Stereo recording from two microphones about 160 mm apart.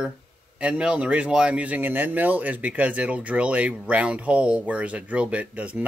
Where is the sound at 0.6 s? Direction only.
5° right (ahead or behind).